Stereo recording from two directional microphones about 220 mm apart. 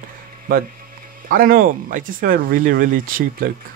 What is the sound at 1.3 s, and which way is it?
Speech, 40° right (ahead or behind).